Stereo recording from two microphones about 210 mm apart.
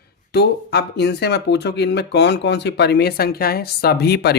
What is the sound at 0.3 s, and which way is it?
Speech, 50° left (ahead or behind).